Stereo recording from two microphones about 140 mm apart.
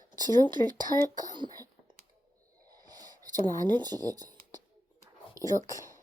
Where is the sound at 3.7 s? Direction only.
30° right (ahead or behind).